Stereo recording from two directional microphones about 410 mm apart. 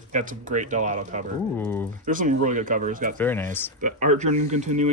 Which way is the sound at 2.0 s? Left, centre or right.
Centre.